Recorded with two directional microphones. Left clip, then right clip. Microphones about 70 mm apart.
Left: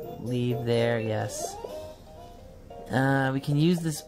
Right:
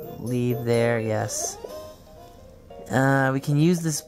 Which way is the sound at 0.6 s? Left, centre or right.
Right.